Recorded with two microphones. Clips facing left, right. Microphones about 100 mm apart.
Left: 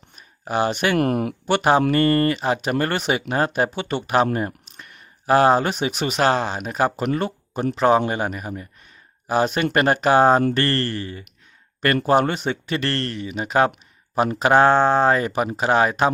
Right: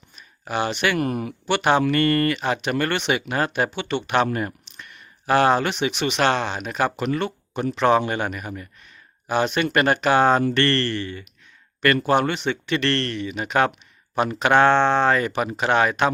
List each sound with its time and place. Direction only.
0.2 s a sound: 35° left (ahead or behind)
0.9 s speech: 60° left (ahead or behind)
1.5 s speech: 35° left (ahead or behind)
6.4 s speech: 10° left (ahead or behind)
7.1 s speech: 35° left (ahead or behind)
14.7 s speech: 10° left (ahead or behind)
15.0 s speech: 30° left (ahead or behind)